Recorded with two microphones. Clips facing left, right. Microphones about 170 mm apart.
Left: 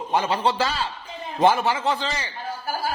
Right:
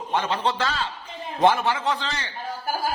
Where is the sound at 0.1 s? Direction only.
10° left (ahead or behind).